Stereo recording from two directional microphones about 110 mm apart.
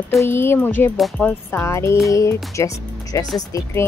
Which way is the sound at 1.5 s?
25° left (ahead or behind).